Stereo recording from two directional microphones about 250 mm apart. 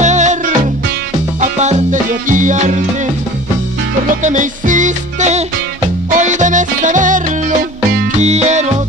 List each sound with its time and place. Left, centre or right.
0.0 s music: right
4.2 s music: right